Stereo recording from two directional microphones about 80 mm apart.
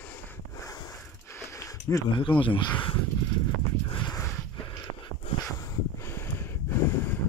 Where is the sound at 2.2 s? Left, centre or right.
Left.